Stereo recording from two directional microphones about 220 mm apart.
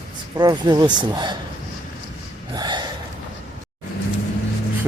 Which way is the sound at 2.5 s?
20° right (ahead or behind).